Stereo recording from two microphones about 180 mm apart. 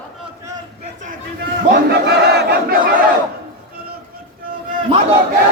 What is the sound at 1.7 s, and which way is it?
Battle cry, 65° right (ahead or behind).